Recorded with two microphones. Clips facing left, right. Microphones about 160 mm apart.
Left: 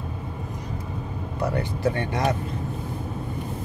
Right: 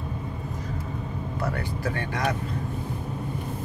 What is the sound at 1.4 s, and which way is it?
Speech, 20° left (ahead or behind).